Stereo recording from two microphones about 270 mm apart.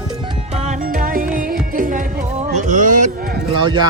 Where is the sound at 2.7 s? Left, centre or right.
Right.